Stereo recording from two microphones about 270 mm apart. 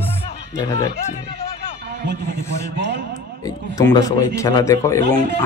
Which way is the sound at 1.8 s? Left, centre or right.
Right.